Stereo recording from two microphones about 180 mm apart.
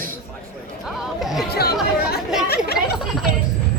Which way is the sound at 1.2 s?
Centre (ahead or behind).